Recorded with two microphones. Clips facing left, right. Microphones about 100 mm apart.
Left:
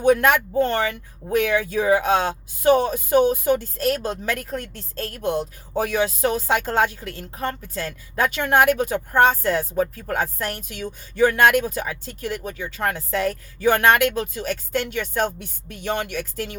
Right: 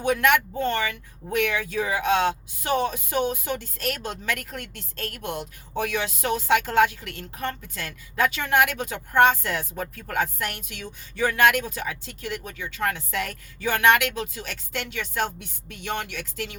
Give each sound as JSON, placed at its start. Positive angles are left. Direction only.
{"t": 0.0, "sound": "speech", "side_deg": 40}